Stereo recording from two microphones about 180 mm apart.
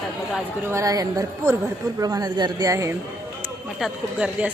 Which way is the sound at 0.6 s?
15° right (ahead or behind).